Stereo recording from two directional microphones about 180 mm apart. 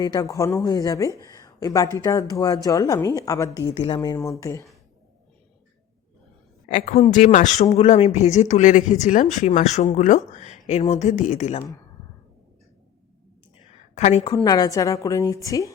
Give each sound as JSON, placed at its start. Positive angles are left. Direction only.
{"t": 0.0, "sound": "speech", "side_deg": 20}
{"t": 6.7, "sound": "speech", "side_deg": 40}
{"t": 13.9, "sound": "a woman's voice", "side_deg": 40}
{"t": 14.3, "sound": "a woman's voice", "side_deg": 20}